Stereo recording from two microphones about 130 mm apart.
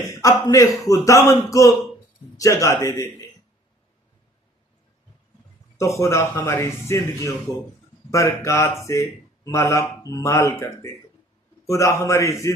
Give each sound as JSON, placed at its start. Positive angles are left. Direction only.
{"t": 0.1, "sound": "speech", "side_deg": 25}
{"t": 5.7, "sound": "speech", "side_deg": 25}